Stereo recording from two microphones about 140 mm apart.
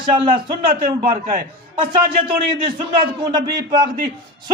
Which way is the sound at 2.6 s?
35° right (ahead or behind).